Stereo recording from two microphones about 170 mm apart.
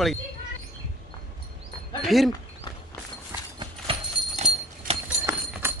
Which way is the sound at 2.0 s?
Centre (ahead or behind).